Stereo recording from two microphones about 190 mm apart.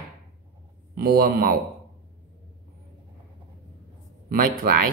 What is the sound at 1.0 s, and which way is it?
Speech, 50° right (ahead or behind).